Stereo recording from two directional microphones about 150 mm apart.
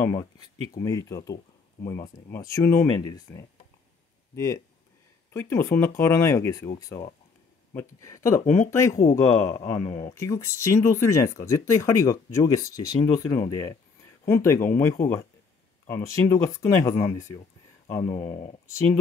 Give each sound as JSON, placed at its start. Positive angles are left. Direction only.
{"t": 0.2, "sound": "speech", "side_deg": 25}
{"t": 9.7, "sound": "speech", "side_deg": 30}
{"t": 10.1, "sound": "speech", "side_deg": 20}
{"t": 18.0, "sound": "speech", "side_deg": 35}